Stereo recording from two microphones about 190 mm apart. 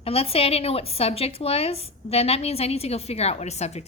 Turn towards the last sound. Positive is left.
turn(degrees=35)  # may be behind; listen again after turning